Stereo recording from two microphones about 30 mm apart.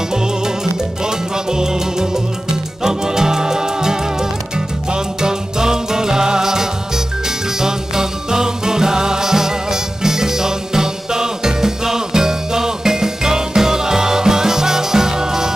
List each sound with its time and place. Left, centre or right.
1.0 s music: right